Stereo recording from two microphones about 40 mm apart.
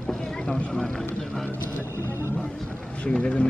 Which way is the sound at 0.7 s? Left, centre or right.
Centre.